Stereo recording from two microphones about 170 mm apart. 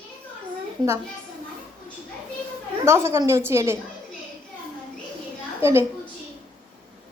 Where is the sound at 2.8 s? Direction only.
15° right (ahead or behind).